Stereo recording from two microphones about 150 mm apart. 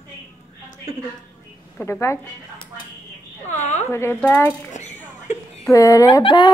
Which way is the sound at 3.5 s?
50° left (ahead or behind).